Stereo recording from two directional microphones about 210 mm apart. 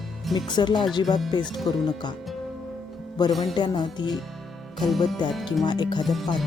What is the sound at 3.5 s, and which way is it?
Speech, 20° left (ahead or behind).